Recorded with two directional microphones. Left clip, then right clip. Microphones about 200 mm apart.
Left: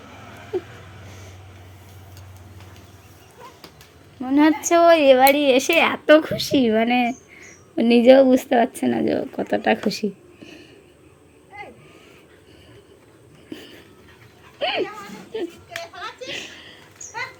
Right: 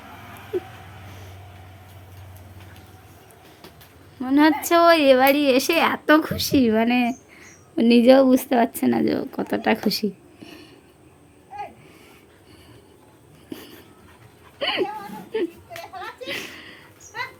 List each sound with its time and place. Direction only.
4.2 s a woman's voice: 5° right (ahead or behind)
13.5 s dog: 20° right (ahead or behind)
14.6 s a sound: 20° right (ahead or behind)